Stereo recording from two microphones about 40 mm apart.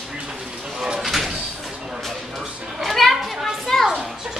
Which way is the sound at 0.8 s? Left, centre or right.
Centre.